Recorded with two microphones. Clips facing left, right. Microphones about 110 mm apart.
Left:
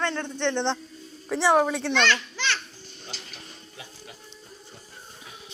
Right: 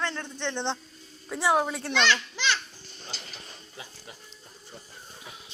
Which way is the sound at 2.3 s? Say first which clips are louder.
Right 1 dB; 15° right (ahead or behind).